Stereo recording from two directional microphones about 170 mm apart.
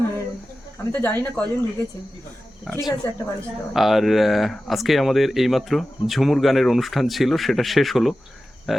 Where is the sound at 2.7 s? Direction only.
Centre (ahead or behind).